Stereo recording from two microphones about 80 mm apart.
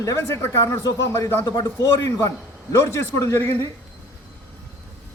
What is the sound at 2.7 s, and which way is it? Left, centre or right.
Speech, left.